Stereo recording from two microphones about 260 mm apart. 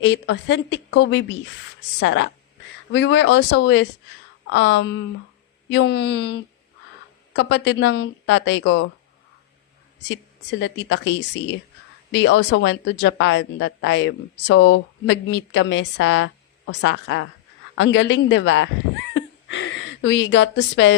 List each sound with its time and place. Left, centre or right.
0.0 s speech: left
5.6 s a sound: left
7.3 s speech: left
10.6 s speech: left
12.1 s speech: left
19.1 s cat: left
20.1 s speech: left